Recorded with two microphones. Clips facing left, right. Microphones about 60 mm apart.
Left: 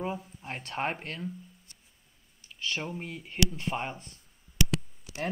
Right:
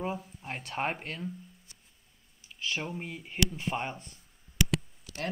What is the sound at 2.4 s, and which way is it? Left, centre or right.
Speech, centre.